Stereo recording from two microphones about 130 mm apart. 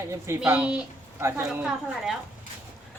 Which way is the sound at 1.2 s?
20° right (ahead or behind).